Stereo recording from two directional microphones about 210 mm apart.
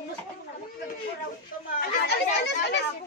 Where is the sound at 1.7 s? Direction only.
50° left (ahead or behind).